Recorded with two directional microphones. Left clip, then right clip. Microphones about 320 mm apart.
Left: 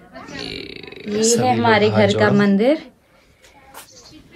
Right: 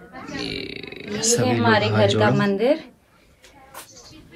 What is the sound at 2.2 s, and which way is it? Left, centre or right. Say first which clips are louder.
Speech: left 3 dB; left.